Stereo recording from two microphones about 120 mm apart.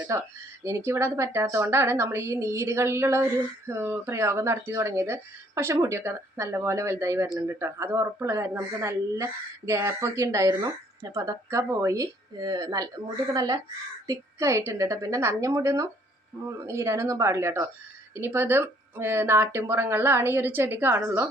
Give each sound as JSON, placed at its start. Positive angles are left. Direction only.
{"t": 0.1, "sound": "speech", "side_deg": -25}